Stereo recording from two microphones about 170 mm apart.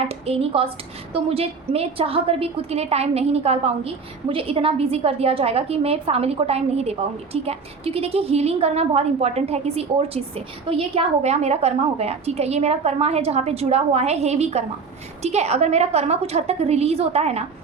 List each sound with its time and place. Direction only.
0.1 s a woman's voice: 35° right (ahead or behind)